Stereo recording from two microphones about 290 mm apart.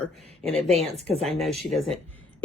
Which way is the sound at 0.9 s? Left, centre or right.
Right.